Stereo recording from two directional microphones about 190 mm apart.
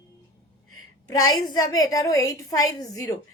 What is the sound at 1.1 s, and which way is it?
A woman's voice, 20° left (ahead or behind).